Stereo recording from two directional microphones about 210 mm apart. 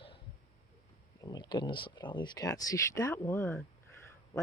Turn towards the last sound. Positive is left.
turn(degrees=10)  # may be behind; listen again after turning